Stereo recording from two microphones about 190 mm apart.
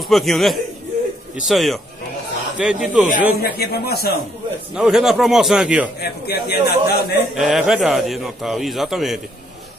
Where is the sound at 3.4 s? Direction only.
55° left (ahead or behind).